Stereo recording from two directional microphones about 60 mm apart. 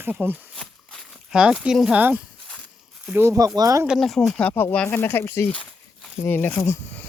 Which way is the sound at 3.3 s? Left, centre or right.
Right.